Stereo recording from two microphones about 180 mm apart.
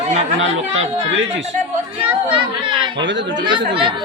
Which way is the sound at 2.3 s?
25° right (ahead or behind).